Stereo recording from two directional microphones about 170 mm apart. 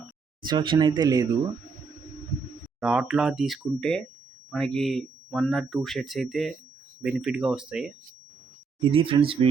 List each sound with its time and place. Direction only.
0.4 s speech: 25° right (ahead or behind)
2.8 s speech: 5° right (ahead or behind)
8.8 s speech: 30° right (ahead or behind)